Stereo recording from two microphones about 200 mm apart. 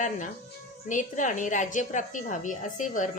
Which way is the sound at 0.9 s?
40° left (ahead or behind).